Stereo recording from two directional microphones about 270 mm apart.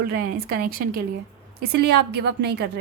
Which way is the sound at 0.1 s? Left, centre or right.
Right.